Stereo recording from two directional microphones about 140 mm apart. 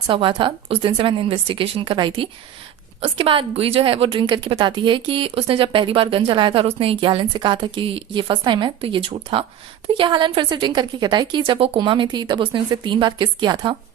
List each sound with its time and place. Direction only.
0.1 s a woman's voice: 35° right (ahead or behind)